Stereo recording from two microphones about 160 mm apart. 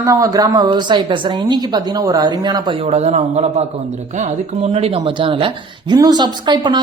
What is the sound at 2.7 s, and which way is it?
A man's voice, 40° right (ahead or behind).